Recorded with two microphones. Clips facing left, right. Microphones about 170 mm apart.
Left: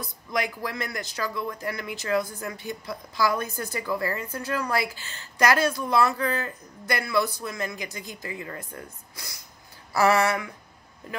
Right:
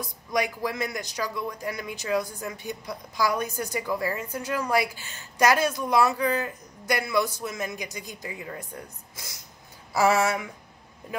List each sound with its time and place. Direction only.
0.0 s speech: 15° right (ahead or behind)